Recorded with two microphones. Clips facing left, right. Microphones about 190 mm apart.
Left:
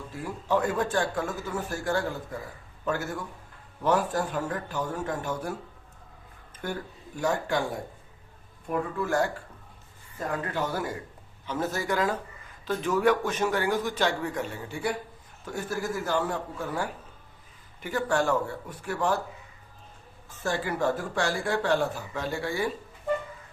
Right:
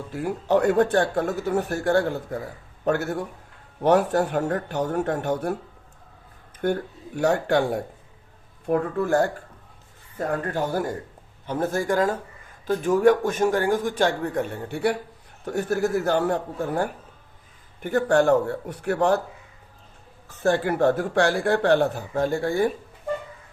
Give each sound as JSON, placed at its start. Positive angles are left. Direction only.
{"t": 0.1, "sound": "speech", "side_deg": -70}
{"t": 6.6, "sound": "speech", "side_deg": -55}
{"t": 8.7, "sound": "a man's voice", "side_deg": -50}
{"t": 17.7, "sound": "speech", "side_deg": -60}
{"t": 20.4, "sound": "speech", "side_deg": -60}